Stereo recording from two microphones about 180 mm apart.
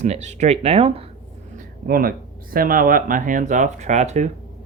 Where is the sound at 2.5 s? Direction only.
55° right (ahead or behind).